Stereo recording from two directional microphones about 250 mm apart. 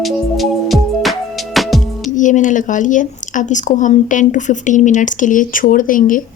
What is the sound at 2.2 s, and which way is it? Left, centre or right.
A woman's voice, left.